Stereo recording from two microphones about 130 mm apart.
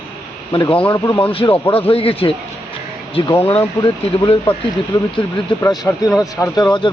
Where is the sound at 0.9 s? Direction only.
30° left (ahead or behind).